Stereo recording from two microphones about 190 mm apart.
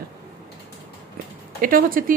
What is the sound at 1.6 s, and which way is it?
Speech, 45° right (ahead or behind).